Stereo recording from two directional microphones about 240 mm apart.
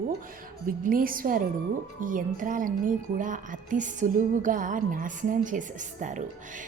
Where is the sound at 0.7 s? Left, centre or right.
Right.